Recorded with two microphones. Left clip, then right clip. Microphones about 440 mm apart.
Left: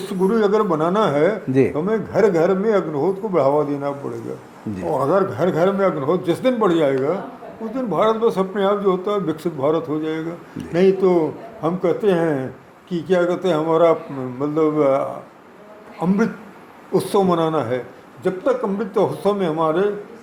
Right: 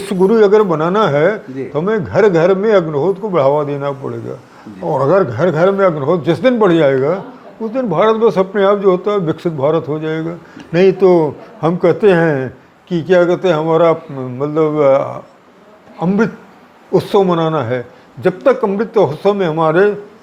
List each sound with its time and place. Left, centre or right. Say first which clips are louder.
0.0 s a man's voice: right 8 dB; right
4.9 s a man's voice: right 6 dB; right
16.0 s a man's voice: right 5 dB; right
18.2 s a man's voice: right 7 dB; right